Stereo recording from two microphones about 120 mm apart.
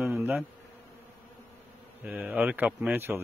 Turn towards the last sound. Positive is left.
turn(degrees=-20)  # may be behind; listen again after turning